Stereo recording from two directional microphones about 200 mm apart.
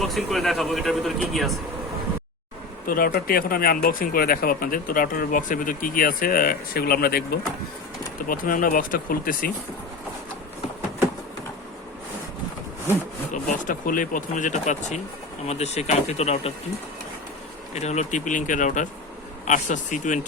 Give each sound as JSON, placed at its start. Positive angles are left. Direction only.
{"t": 0.0, "sound": "speech", "side_deg": 0}
{"t": 2.8, "sound": "speech", "side_deg": 45}
{"t": 8.3, "sound": "speech", "side_deg": 45}
{"t": 13.3, "sound": "speech", "side_deg": 40}
{"t": 17.7, "sound": "speech", "side_deg": 35}